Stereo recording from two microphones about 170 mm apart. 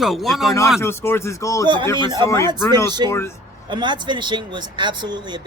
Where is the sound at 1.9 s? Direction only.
25° right (ahead or behind).